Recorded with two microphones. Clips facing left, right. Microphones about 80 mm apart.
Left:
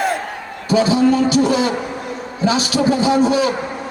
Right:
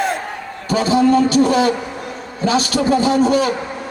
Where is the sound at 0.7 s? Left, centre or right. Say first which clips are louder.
Even; right.